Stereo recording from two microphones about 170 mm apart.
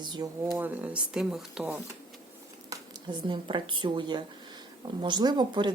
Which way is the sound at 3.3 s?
30° right (ahead or behind).